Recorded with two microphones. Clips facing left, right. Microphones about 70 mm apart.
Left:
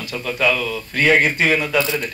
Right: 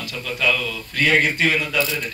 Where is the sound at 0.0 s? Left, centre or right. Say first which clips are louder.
Left 3 dB; left.